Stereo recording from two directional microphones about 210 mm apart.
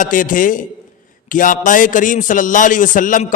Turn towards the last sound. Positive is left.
turn(degrees=40)  # may be behind; listen again after turning